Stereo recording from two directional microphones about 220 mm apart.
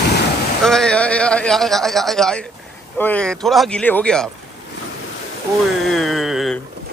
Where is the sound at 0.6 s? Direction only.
5° left (ahead or behind).